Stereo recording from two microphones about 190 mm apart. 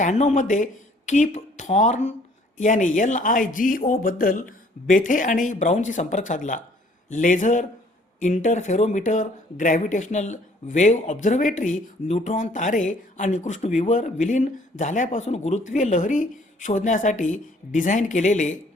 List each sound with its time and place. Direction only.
0.0 s speech: 40° left (ahead or behind)